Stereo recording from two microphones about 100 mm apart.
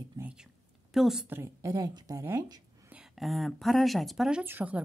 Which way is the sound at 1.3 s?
30° right (ahead or behind).